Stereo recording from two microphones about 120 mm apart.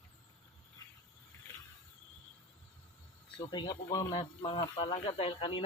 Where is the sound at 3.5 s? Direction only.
35° left (ahead or behind).